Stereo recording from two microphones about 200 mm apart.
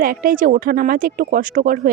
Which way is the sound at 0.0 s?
45° right (ahead or behind).